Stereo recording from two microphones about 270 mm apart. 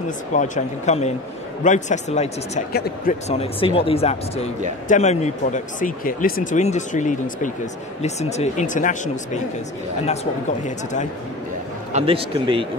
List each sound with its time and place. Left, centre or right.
0.3 s speech: left
10.6 s speech: left
11.9 s a man's voice: centre